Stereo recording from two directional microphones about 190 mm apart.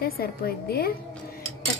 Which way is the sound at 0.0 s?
50° left (ahead or behind).